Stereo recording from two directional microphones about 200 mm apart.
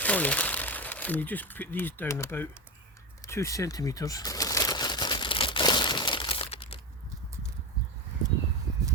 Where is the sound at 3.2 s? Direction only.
15° left (ahead or behind).